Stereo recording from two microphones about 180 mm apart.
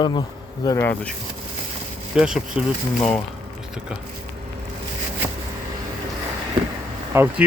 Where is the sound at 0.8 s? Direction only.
10° left (ahead or behind).